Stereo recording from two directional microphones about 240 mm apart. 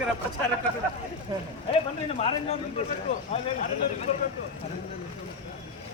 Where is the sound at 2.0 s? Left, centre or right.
Left.